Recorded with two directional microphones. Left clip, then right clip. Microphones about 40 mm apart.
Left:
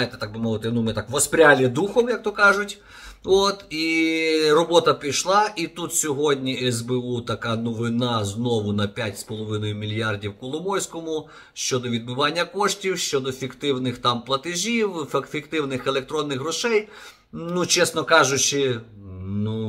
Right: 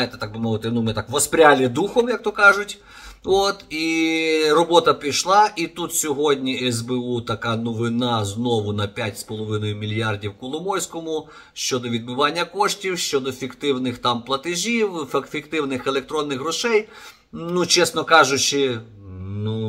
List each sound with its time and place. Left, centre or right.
0.2 s speech: centre
3.3 s speech: right